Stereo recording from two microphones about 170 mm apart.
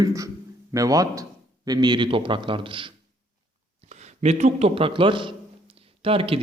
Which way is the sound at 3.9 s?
40° right (ahead or behind).